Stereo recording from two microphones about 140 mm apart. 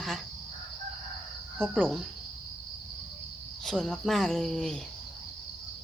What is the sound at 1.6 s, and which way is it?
Speech, 5° left (ahead or behind).